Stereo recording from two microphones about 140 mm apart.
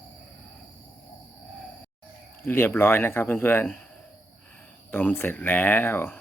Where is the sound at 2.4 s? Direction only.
15° left (ahead or behind).